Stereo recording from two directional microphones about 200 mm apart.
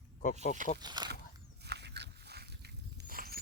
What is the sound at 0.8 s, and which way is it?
Speech, 20° right (ahead or behind).